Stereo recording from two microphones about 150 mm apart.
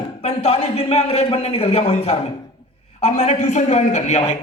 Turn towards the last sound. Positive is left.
turn(degrees=50)  # may be behind; listen again after turning